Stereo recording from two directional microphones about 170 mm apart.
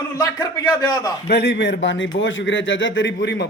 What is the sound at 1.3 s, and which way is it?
A man's voice, 80° left.